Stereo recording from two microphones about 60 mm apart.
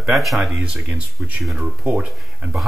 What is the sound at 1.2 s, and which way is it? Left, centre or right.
Speech, right.